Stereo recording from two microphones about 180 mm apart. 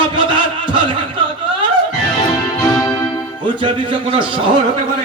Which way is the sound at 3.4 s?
25° right (ahead or behind).